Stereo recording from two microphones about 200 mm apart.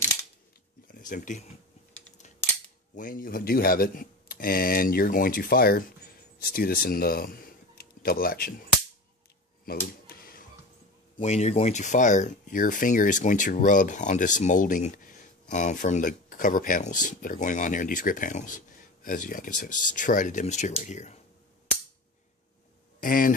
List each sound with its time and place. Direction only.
0.8 s speech: 40° left (ahead or behind)
3.0 s speech: 45° left (ahead or behind)
9.7 s a sound: 50° left (ahead or behind)
11.1 s speech: 35° left (ahead or behind)
23.0 s speech: 45° left (ahead or behind)